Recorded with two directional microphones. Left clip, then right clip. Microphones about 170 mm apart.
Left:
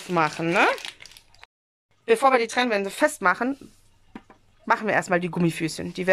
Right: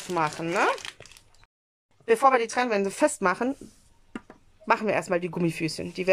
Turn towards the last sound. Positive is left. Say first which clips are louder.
# left 1 dB
turn(degrees=0)  # may be behind; listen again after turning